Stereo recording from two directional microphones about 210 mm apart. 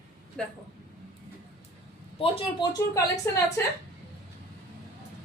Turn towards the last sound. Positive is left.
turn(degrees=15)  # may be behind; listen again after turning